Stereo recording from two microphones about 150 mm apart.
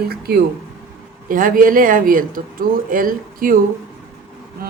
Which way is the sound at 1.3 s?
65° right (ahead or behind).